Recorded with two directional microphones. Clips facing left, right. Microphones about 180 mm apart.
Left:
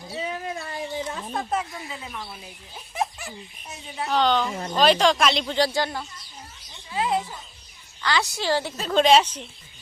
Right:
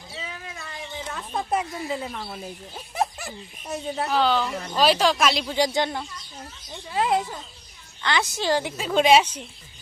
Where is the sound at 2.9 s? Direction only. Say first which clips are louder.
Right 2 dB; 35° right (ahead or behind).